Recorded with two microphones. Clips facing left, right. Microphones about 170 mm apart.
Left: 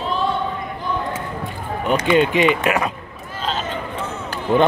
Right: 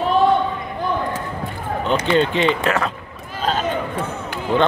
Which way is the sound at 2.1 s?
15° left (ahead or behind).